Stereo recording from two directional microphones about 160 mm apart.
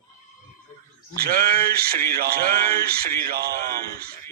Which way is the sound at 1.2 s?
70° right (ahead or behind).